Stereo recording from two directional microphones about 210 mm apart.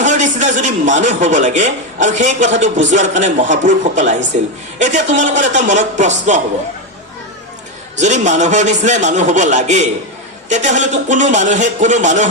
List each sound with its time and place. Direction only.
0.0 s a man's voice: 35° right (ahead or behind)
7.9 s a man's voice: 35° right (ahead or behind)